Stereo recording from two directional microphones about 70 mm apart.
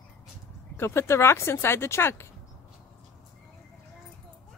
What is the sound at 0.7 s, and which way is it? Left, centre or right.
Speech, left.